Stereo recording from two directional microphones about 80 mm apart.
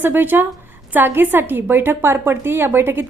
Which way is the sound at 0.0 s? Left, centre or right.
Right.